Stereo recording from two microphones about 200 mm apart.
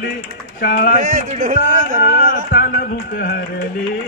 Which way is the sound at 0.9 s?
40° right (ahead or behind).